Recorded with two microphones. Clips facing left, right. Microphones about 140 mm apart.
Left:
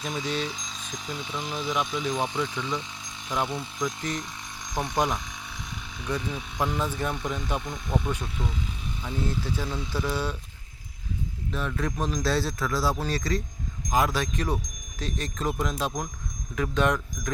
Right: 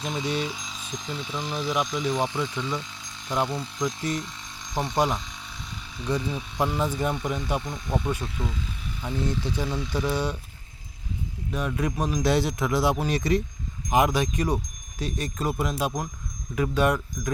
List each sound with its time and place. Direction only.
0.1 s speech: 15° right (ahead or behind); by 1.7 s 5° left (ahead or behind)
1.7 s speech: 10° right (ahead or behind)
3.4 s speech: 5° left (ahead or behind)
6.1 s speech: 15° right (ahead or behind)
11.5 s speech: 15° right (ahead or behind)